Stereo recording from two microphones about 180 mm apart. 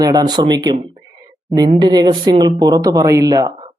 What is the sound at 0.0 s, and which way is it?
Speech, 20° right (ahead or behind).